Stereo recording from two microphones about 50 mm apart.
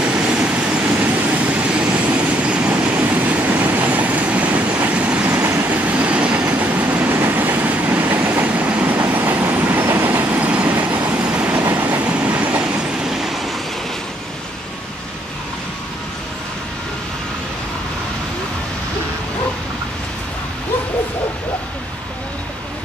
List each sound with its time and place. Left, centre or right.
0.0 s train: right
0.9 s vehicle: right
2.8 s train: right
5.3 s train: right
5.6 s train: right
6.4 s train: right
8.8 s train: right
10.9 s vehicle: right
11.1 s train: centre
11.8 s train: right
13.0 s train: centre